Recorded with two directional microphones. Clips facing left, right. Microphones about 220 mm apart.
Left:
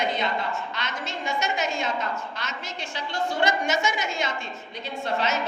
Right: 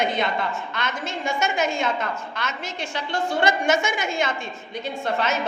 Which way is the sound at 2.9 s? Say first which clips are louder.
Right 3 dB; 50° right (ahead or behind).